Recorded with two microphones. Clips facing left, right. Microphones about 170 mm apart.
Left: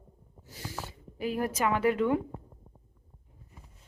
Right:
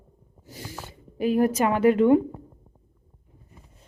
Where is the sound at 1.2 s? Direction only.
20° right (ahead or behind).